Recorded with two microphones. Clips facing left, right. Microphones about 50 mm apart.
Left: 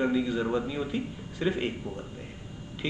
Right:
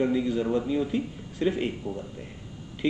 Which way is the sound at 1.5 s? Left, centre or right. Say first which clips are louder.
Right 2 dB; centre.